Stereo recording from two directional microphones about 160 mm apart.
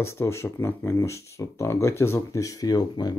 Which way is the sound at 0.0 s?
15° left (ahead or behind).